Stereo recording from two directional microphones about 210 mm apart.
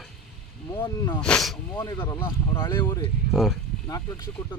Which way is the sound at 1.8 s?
15° left (ahead or behind).